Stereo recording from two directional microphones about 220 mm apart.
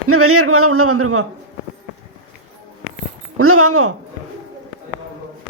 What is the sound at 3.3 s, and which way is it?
Speech, 80° right.